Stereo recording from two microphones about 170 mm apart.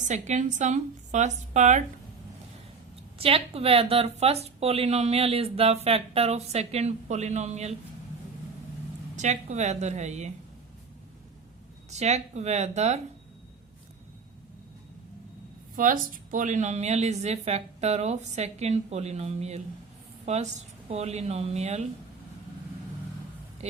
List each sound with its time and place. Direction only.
0.1 s a woman's voice: 45° right (ahead or behind)
3.2 s speech: 35° right (ahead or behind)
9.1 s a woman's voice: 45° right (ahead or behind)
11.9 s speech: 40° right (ahead or behind)
15.7 s a woman's voice: 50° right (ahead or behind)